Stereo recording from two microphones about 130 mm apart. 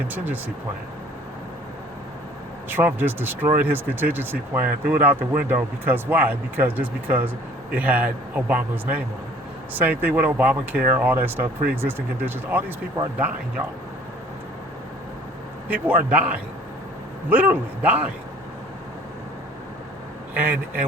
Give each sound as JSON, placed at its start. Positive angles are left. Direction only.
{"t": 0.1, "sound": "speech", "side_deg": -15}
{"t": 2.6, "sound": "speech", "side_deg": -15}
{"t": 15.7, "sound": "speech", "side_deg": -15}
{"t": 20.3, "sound": "a man's voice", "side_deg": -15}